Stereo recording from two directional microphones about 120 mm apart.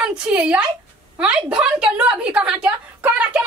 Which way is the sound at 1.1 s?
10° right (ahead or behind).